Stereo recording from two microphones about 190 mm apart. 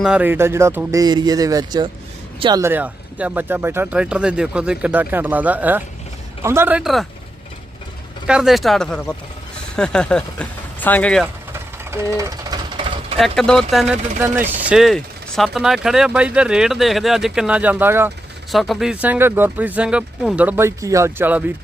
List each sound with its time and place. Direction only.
0.0 s speech: 5° right (ahead or behind)
8.3 s speech: centre (ahead or behind)
11.9 s jackhammer: 15° right (ahead or behind)
13.1 s speech: centre (ahead or behind)
18.5 s speech: centre (ahead or behind)